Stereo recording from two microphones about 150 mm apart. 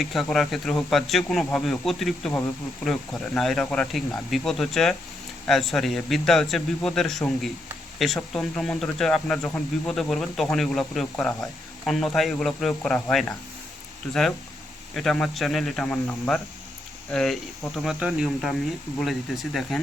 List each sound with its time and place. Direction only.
0.0 s speech: centre (ahead or behind)